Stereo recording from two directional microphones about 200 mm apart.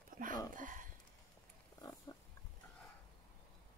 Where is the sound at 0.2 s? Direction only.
45° right (ahead or behind).